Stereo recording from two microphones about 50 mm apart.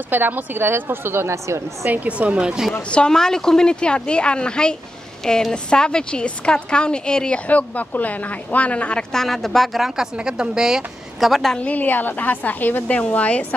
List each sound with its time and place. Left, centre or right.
0.1 s a woman's voice: right
1.3 s a woman's voice: right
1.9 s a woman's voice: right
2.9 s a woman's voice: centre
9.1 s speech: centre
10.1 s a woman's voice: centre
11.1 s speech: centre
11.5 s a woman's voice: left
12.8 s a woman's voice: left